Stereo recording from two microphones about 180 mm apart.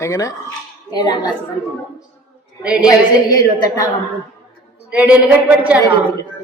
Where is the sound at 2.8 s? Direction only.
20° left (ahead or behind).